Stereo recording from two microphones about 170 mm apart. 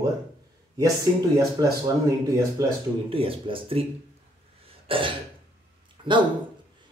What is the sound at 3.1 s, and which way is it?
Speech, 35° right (ahead or behind).